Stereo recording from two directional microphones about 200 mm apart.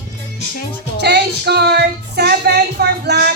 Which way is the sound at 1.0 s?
55° right (ahead or behind).